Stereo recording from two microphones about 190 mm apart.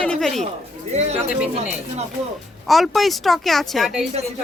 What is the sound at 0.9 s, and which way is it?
Speech, 35° right (ahead or behind).